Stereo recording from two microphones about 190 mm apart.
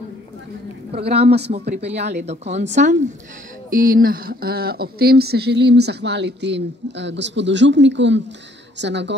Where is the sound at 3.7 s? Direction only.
50° right (ahead or behind).